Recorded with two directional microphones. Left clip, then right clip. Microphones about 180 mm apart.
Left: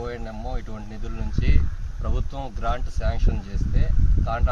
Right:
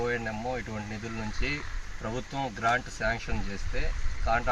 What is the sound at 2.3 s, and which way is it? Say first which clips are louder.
Speech: right 3 dB; 15° left (ahead or behind).